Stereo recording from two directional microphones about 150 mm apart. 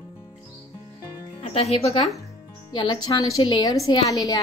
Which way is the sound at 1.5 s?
45° left (ahead or behind).